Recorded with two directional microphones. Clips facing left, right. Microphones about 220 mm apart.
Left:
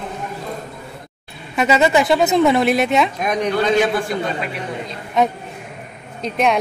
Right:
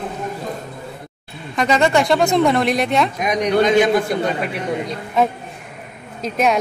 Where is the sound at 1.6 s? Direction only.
5° left (ahead or behind).